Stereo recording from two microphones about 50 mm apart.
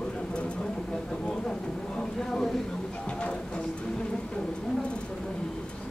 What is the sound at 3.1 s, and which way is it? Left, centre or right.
Music, left.